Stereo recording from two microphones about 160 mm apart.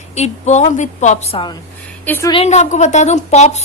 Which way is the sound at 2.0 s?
15° left (ahead or behind).